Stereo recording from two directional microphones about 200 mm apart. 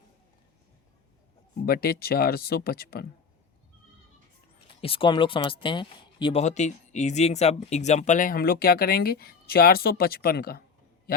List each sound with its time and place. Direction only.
1.6 s speech: 50° left (ahead or behind)
4.8 s speech: 25° left (ahead or behind); by 10.6 s 50° left (ahead or behind)